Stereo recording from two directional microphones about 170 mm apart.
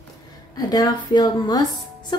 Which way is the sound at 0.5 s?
25° left (ahead or behind).